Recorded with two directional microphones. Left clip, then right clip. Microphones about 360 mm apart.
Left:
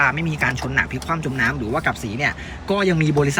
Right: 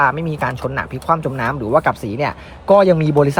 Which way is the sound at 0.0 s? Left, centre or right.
Centre.